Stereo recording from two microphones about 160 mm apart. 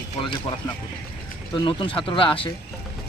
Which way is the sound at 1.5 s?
30° left (ahead or behind).